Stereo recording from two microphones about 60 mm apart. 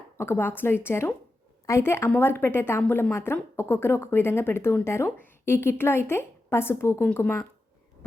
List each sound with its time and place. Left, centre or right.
0.2 s a woman's voice: left
2.1 s a woman's voice: left
7.0 s a woman's voice: left